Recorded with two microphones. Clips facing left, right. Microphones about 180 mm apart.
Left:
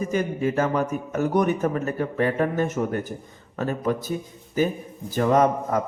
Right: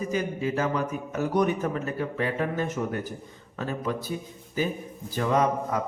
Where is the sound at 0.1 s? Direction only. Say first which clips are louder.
Left 3 dB; 50° left (ahead or behind).